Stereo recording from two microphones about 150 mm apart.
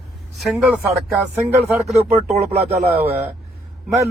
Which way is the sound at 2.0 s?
45° right (ahead or behind).